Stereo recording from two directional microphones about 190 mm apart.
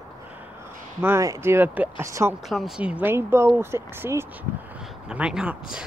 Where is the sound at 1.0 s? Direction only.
15° right (ahead or behind).